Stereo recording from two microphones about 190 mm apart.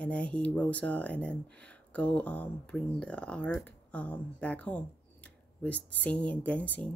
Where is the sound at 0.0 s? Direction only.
5° left (ahead or behind).